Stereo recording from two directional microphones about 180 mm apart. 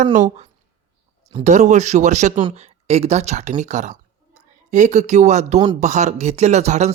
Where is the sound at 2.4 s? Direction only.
30° right (ahead or behind).